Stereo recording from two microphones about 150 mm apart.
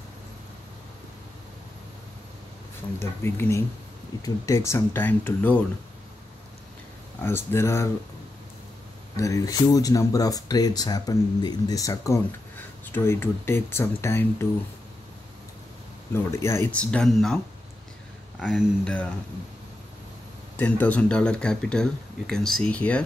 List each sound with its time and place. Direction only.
3.3 s speech: 15° left (ahead or behind)
7.2 s speech: 15° left (ahead or behind)
9.1 s speech: 20° left (ahead or behind)
16.1 s speech: 20° left (ahead or behind)
16.8 s speech: 5° left (ahead or behind)
18.4 s speech: 5° left (ahead or behind)
20.5 s speech: 10° left (ahead or behind)